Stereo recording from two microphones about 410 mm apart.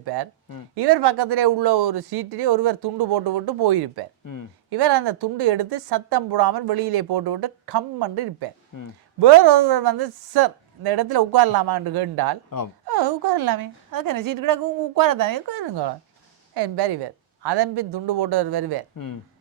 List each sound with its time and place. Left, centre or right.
0.0 s a woman's voice: right
8.7 s speech: left
9.2 s a woman's voice: right
18.9 s speech: left